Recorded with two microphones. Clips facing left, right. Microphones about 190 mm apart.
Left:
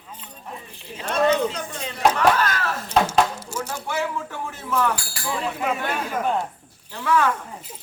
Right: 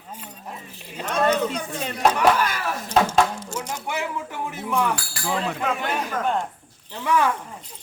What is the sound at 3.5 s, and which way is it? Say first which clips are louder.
Speech: left 3 dB; 10° right (ahead or behind).